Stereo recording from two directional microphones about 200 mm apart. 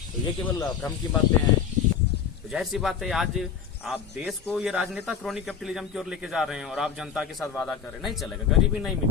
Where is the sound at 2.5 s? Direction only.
Centre (ahead or behind).